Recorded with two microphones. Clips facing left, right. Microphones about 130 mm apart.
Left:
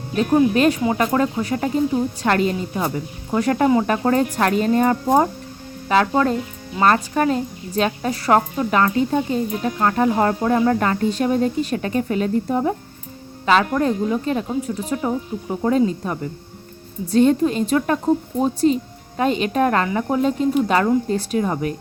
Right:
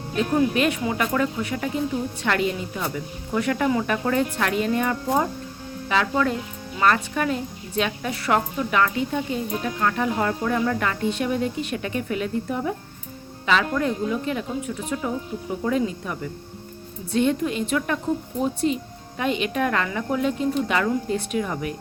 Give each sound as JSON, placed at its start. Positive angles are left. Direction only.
{"t": 0.5, "sound": "a woman's voice", "side_deg": 35}